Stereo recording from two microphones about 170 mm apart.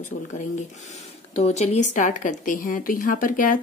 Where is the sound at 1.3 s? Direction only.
40° left (ahead or behind).